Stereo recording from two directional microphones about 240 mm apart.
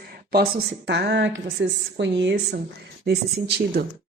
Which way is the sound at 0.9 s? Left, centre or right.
Right.